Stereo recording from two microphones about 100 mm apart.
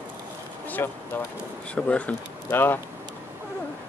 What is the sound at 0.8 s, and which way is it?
Speech, 25° left (ahead or behind).